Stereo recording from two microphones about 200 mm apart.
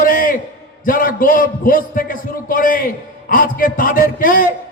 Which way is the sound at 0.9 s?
45° left (ahead or behind).